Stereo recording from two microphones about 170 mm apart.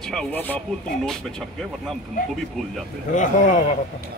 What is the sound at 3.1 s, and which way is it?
Speech, 50° left (ahead or behind).